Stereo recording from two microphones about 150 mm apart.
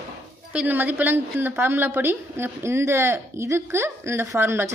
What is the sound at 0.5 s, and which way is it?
Speech, 10° right (ahead or behind).